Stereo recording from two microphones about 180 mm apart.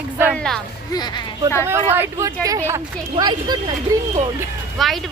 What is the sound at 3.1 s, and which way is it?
Speech, 25° right (ahead or behind).